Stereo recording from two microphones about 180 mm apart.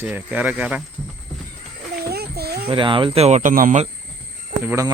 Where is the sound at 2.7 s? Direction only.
25° right (ahead or behind); by 3.9 s 45° right (ahead or behind).